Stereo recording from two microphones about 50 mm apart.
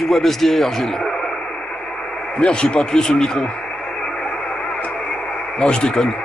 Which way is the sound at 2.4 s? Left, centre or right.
Centre.